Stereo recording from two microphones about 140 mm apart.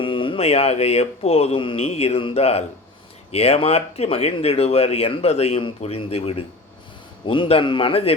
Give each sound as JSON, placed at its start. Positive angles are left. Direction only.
{"t": 0.0, "sound": "a man's voice", "side_deg": 40}